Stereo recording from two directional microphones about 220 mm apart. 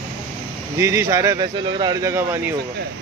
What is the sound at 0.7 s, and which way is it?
Speech, 10° right (ahead or behind).